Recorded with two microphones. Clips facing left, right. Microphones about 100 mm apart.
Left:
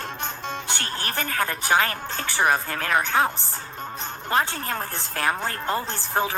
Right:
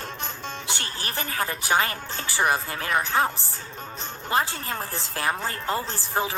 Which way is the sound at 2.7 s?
55° left (ahead or behind).